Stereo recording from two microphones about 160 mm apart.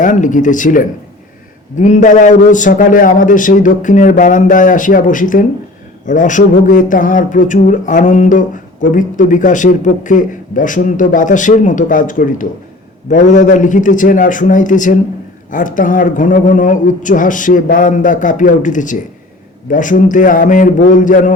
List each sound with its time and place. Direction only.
0.0 s a man's voice: 55° left (ahead or behind)